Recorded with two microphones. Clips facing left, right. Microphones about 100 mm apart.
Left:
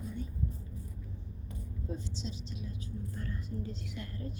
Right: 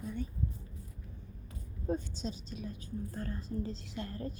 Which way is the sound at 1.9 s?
45° right (ahead or behind).